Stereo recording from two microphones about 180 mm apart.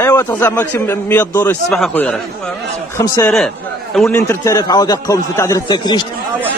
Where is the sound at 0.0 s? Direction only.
15° left (ahead or behind).